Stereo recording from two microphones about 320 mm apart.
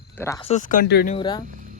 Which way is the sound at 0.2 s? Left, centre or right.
Centre.